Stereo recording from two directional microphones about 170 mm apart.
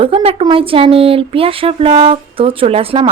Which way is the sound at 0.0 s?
35° right (ahead or behind).